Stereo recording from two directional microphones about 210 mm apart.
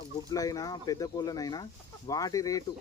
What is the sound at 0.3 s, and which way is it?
Speech, 15° left (ahead or behind).